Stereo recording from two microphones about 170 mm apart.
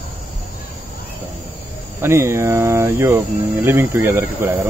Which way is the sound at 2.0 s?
15° right (ahead or behind).